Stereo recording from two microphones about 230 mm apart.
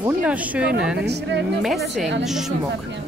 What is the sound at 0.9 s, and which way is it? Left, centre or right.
Speech, right.